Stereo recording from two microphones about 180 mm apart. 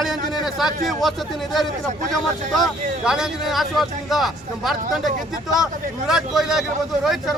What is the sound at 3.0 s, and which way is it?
A man's voice, 5° right (ahead or behind).